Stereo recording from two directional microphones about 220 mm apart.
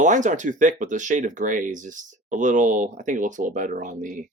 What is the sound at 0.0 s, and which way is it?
Speech, 35° right (ahead or behind).